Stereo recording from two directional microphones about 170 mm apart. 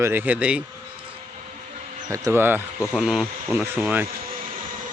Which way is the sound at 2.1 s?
15° right (ahead or behind).